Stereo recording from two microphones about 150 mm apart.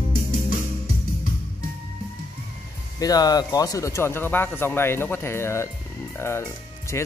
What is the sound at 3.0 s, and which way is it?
Speech, 25° left (ahead or behind).